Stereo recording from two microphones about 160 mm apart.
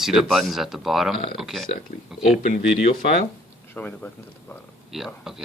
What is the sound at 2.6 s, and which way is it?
Speech, 45° left (ahead or behind).